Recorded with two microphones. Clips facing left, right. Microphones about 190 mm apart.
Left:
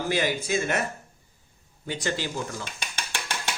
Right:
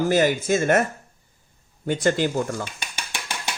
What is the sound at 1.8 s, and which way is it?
Speech, 50° right (ahead or behind).